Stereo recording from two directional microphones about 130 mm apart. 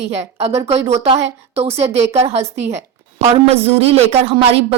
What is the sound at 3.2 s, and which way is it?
Speech, 50° right (ahead or behind).